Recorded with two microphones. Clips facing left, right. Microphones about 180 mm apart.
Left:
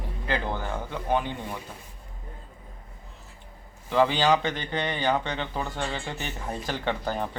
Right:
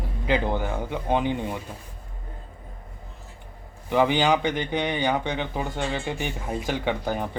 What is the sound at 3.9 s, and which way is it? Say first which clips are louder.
Speech: right 1 dB; 15° right (ahead or behind).